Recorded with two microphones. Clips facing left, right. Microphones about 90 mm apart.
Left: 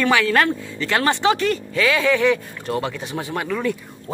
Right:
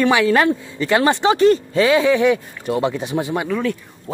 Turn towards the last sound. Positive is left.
turn(degrees=0)  # may be behind; listen again after turning